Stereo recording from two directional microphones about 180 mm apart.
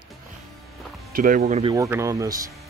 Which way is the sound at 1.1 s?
50° right (ahead or behind).